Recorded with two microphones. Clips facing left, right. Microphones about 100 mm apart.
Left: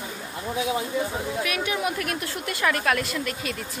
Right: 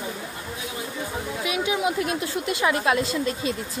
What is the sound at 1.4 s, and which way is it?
A woman's voice, 20° right (ahead or behind).